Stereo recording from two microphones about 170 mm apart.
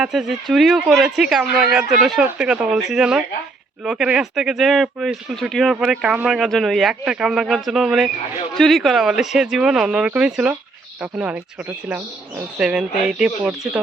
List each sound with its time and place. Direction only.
0.0 s speech: centre (ahead or behind)
12.5 s speech: 5° right (ahead or behind)